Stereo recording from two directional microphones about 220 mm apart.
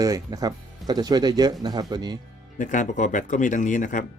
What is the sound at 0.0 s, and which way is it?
Speech, 15° right (ahead or behind).